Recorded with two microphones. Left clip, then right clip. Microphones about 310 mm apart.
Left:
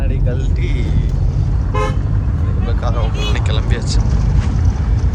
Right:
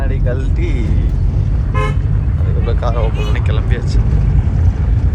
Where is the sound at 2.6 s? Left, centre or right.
Centre.